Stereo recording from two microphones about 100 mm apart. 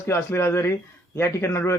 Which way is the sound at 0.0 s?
25° left (ahead or behind).